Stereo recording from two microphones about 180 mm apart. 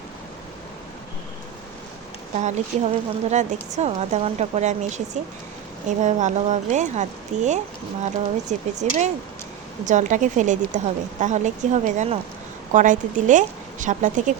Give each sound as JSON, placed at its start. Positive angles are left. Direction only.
{"t": 2.4, "sound": "speech", "side_deg": -40}
{"t": 6.0, "sound": "speech", "side_deg": -40}